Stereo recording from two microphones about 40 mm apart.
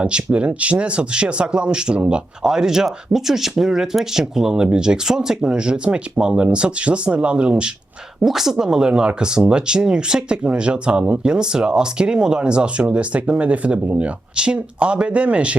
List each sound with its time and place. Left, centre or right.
0.0 s speech: right
2.4 s speech: centre
8.2 s speech: centre; by 15.5 s right